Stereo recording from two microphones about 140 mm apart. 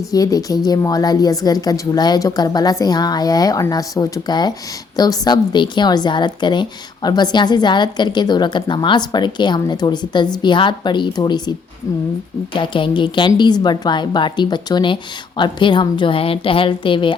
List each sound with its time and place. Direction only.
0.1 s a woman's voice: 25° left (ahead or behind)
12.5 s a woman's voice: 35° left (ahead or behind)